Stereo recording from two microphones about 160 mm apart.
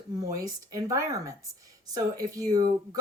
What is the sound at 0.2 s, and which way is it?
Speech, 20° right (ahead or behind).